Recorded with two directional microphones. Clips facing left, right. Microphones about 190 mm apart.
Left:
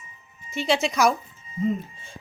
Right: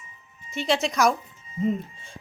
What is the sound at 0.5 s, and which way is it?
Speech, centre (ahead or behind).